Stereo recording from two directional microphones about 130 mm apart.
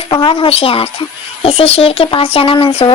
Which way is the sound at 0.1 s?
40° left (ahead or behind).